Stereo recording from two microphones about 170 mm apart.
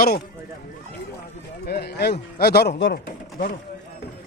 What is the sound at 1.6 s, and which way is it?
Speech, 70° left (ahead or behind).